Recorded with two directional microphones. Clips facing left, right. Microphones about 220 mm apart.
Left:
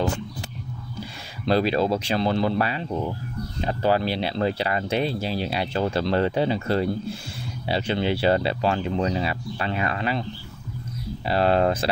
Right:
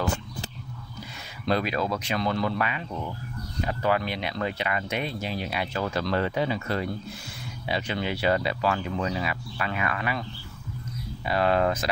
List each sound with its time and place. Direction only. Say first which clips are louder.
1.4 s speech: left 5 dB; 30° left (ahead or behind)
11.2 s speech: left 3 dB; 30° left (ahead or behind)